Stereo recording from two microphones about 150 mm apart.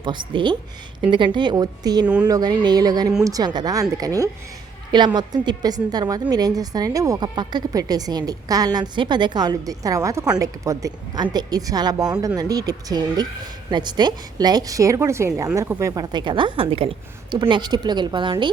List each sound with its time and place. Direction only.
0.0 s a woman's voice: 30° right (ahead or behind)